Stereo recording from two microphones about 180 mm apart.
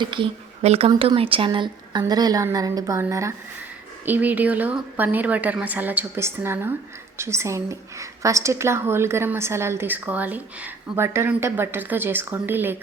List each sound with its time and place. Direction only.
0.0 s a woman's voice: 25° right (ahead or behind); by 12.7 s 10° right (ahead or behind)